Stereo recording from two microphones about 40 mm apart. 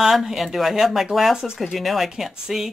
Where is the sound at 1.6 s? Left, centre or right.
Centre.